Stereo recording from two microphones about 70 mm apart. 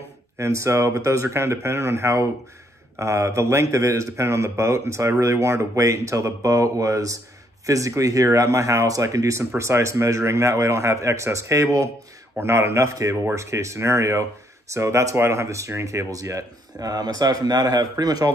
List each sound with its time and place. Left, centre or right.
0.4 s speech: right
12.4 s speech: right